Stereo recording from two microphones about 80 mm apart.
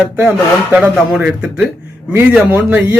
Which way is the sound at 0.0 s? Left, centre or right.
Centre.